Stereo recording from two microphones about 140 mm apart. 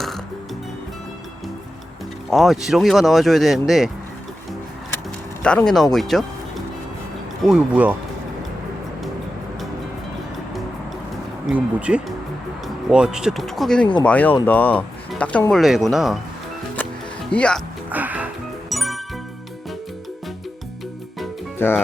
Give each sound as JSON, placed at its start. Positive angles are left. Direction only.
{"t": 2.3, "sound": "speech", "side_deg": 0}
{"t": 5.4, "sound": "speech", "side_deg": 5}
{"t": 7.4, "sound": "speech", "side_deg": -5}
{"t": 11.5, "sound": "speech", "side_deg": -10}
{"t": 17.3, "sound": "speech", "side_deg": 5}
{"t": 17.8, "sound": "music", "side_deg": -10}
{"t": 18.7, "sound": "music", "side_deg": 0}
{"t": 21.6, "sound": "speech", "side_deg": 15}